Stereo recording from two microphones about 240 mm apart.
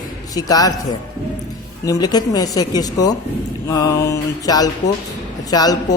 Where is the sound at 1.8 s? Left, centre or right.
Centre.